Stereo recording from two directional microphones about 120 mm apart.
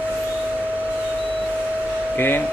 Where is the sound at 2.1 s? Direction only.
15° left (ahead or behind).